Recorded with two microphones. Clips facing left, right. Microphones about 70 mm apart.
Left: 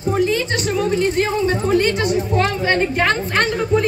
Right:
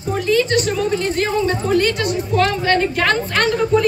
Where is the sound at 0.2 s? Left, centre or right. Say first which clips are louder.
Right 6 dB; centre.